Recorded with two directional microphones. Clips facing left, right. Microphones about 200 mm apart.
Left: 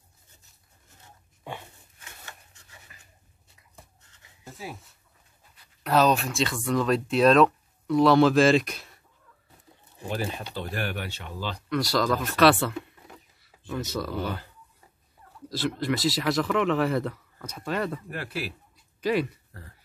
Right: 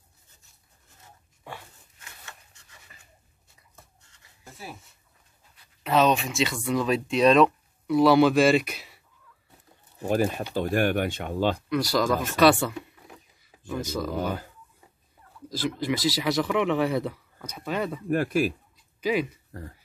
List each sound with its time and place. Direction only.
1.4 s dog: 20° left (ahead or behind)
5.9 s speech: centre (ahead or behind)
10.0 s speech: 45° right (ahead or behind)
11.7 s speech: centre (ahead or behind)
14.1 s speech: 45° right (ahead or behind)
15.8 s speech: centre (ahead or behind)
18.1 s speech: 45° right (ahead or behind)
19.0 s speech: centre (ahead or behind)